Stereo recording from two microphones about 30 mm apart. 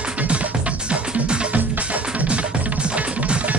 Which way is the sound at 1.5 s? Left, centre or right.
Right.